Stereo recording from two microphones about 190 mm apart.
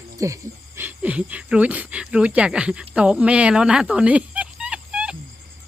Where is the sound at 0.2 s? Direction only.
15° right (ahead or behind).